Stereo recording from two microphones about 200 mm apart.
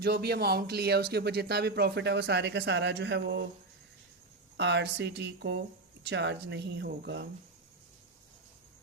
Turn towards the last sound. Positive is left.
turn(degrees=-60)  # may be behind; listen again after turning